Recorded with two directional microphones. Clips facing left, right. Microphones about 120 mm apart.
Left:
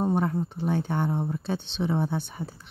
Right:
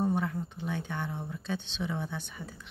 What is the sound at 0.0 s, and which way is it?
Speech, 40° left (ahead or behind).